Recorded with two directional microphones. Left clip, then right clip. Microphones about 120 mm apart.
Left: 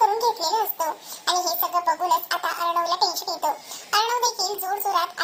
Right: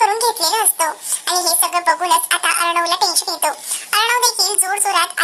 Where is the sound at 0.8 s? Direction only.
35° right (ahead or behind).